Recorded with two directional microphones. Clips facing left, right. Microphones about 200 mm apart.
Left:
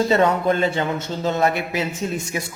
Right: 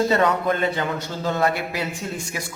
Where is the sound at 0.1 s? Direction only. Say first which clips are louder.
Left 2 dB; 25° left (ahead or behind).